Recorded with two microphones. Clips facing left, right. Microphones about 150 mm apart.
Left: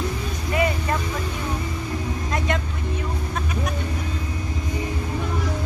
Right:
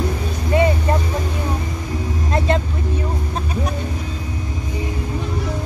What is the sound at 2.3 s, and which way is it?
Vehicle, 30° right (ahead or behind).